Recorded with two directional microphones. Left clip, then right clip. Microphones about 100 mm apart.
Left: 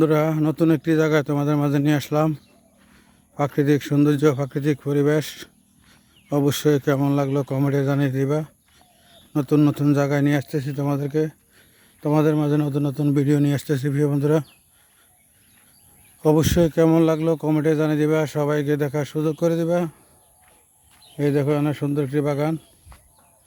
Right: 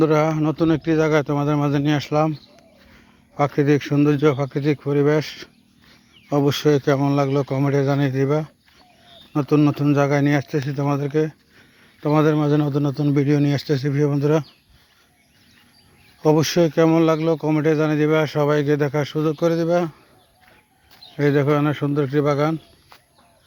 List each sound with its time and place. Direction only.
0.0 s speech: 60° left (ahead or behind); by 2.3 s 80° left
3.3 s speech: 60° left (ahead or behind)
12.4 s a man's voice: 30° left (ahead or behind)
12.6 s speech: 40° left (ahead or behind)
13.1 s speech: 65° left (ahead or behind)
16.2 s speech: 65° left (ahead or behind)
21.2 s speech: 40° left (ahead or behind)